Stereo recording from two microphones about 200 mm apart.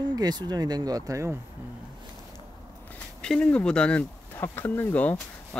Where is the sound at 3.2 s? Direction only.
5° left (ahead or behind).